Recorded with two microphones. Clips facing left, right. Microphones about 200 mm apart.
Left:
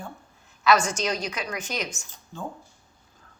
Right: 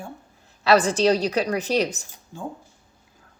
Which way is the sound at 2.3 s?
10° right (ahead or behind).